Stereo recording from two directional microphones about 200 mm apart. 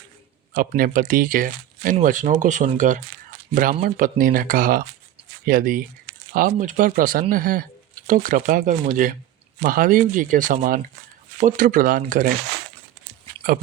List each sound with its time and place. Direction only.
0.5 s speech: 45° right (ahead or behind)